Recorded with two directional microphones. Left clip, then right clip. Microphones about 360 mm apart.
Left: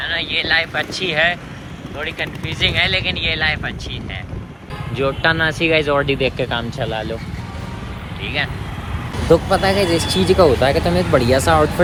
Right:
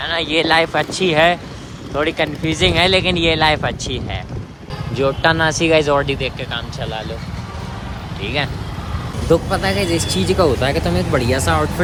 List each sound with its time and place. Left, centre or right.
0.0 s speech: centre
4.9 s speech: centre
6.7 s speech: centre
8.2 s speech: centre